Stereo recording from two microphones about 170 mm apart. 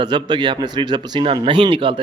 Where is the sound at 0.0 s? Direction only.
25° right (ahead or behind).